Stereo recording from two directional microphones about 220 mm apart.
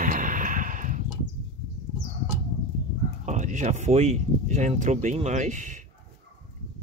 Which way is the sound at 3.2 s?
35° right (ahead or behind).